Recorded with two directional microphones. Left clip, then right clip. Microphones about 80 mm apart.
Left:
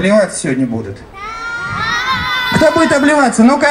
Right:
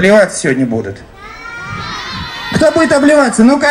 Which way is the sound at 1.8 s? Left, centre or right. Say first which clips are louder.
Left 10 dB; left.